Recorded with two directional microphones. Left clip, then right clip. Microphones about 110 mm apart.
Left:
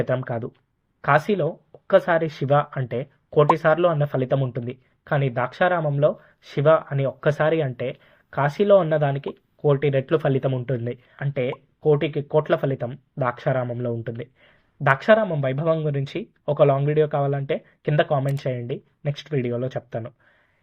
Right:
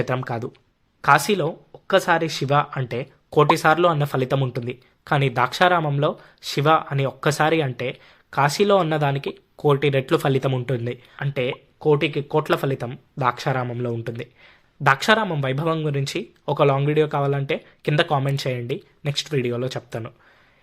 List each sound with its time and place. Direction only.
0.0 s speech: 25° right (ahead or behind)